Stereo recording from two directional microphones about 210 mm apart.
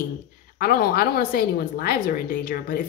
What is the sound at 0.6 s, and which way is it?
Speech, 45° left (ahead or behind).